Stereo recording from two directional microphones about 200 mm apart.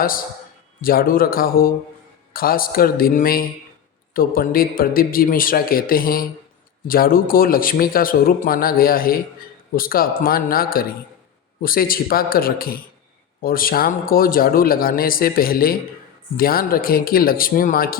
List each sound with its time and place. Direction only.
0.8 s speech: 45° left (ahead or behind)